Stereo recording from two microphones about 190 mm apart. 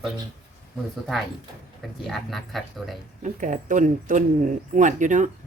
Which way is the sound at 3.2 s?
40° right (ahead or behind).